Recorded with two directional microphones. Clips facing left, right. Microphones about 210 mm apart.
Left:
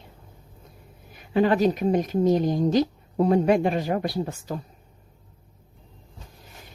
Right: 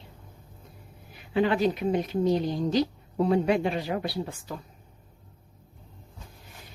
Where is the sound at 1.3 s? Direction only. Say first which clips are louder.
Left 4 dB; 45° left (ahead or behind).